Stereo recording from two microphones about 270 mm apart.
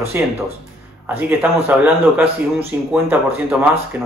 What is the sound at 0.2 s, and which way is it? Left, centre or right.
Speech, centre.